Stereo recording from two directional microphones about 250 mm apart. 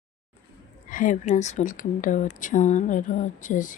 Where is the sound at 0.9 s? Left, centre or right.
Left.